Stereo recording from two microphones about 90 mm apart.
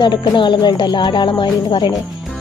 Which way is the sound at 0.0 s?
60° left (ahead or behind).